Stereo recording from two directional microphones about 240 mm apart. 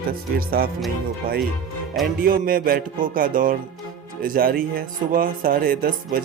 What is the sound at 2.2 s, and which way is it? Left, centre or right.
Speech, right.